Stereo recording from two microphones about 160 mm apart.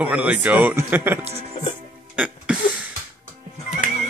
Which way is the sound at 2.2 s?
10° right (ahead or behind).